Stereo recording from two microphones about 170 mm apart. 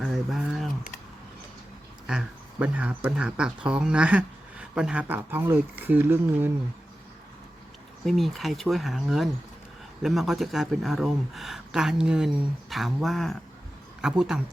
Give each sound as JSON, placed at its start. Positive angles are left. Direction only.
{"t": 0.0, "sound": "a sound", "side_deg": 0}
{"t": 2.0, "sound": "speech", "side_deg": -5}
{"t": 8.0, "sound": "speech", "side_deg": 0}